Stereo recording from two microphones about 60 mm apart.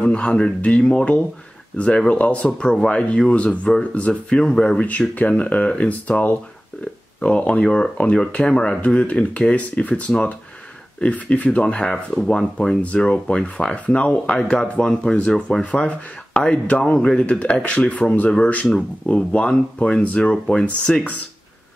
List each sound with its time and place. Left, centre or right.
0.0 s speech: centre